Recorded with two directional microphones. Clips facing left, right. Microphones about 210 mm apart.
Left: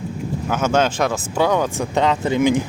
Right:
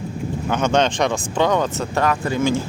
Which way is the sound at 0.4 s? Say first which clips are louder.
Even; 5° left (ahead or behind).